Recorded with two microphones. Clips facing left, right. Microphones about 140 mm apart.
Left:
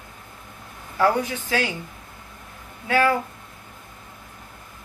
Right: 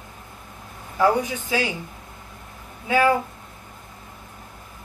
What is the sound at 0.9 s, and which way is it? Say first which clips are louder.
Speech: right 1 dB; 15° right (ahead or behind).